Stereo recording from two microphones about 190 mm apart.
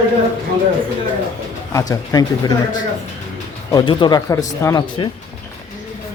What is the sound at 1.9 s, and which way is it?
Speech, 20° left (ahead or behind).